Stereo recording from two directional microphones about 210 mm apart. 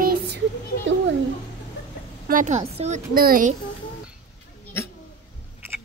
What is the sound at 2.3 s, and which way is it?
Speech, 35° right (ahead or behind).